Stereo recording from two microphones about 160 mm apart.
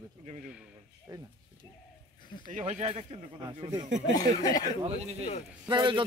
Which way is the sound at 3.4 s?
25° right (ahead or behind).